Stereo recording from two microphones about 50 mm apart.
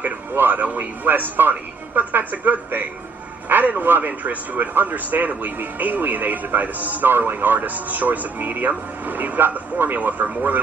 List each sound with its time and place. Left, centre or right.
0.0 s a man's voice: right